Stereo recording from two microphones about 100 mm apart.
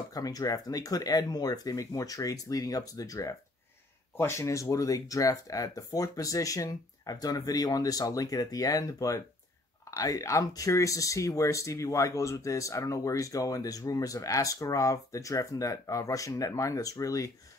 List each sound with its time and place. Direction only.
0.1 s speech: 35° left (ahead or behind)